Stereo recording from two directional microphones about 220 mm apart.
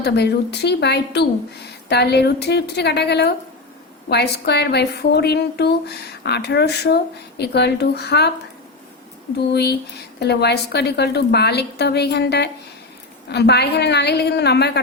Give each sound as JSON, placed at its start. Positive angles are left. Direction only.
{"t": 0.0, "sound": "a woman's voice", "side_deg": 50}
{"t": 9.5, "sound": "a woman's voice", "side_deg": 50}